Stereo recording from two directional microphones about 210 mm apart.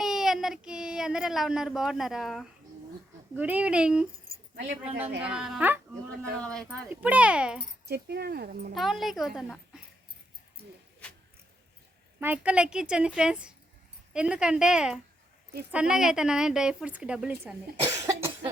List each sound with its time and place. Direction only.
0.0 s child singing: centre (ahead or behind)
3.3 s a woman's voice: 5° right (ahead or behind)
5.2 s a woman's voice: 5° right (ahead or behind)
6.4 s a woman's voice: 5° left (ahead or behind)
7.9 s speech: 50° right (ahead or behind)
8.7 s a woman's voice: centre (ahead or behind)
12.2 s a woman's voice: 5° right (ahead or behind)
17.8 s cough: 15° right (ahead or behind)